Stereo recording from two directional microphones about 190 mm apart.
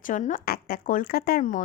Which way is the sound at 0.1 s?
40° left (ahead or behind).